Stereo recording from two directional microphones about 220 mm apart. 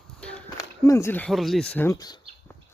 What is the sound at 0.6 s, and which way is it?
Speech, 15° left (ahead or behind).